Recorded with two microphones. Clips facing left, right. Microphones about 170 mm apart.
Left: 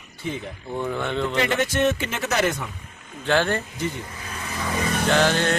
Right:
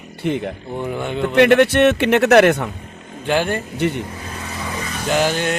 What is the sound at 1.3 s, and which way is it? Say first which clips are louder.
A man's voice: right 13 dB; 65° right (ahead or behind).